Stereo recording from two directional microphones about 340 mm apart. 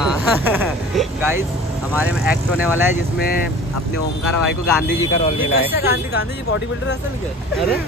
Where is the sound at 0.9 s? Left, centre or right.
Centre.